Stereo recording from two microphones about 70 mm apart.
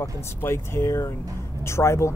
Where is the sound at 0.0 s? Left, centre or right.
Left.